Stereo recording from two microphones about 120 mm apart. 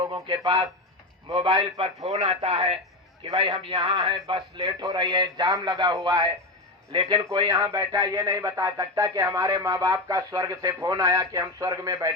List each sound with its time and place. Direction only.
0.3 s a man's voice: 40° right (ahead or behind); by 8.6 s 20° right (ahead or behind)
8.6 s speech: 30° right (ahead or behind)